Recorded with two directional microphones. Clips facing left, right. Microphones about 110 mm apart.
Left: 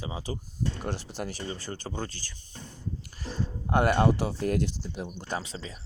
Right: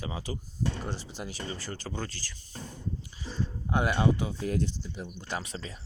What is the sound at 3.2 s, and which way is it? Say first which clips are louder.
Speech: left 2 dB; 55° left (ahead or behind).